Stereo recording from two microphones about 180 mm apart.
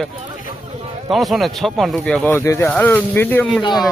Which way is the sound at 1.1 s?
Centre (ahead or behind).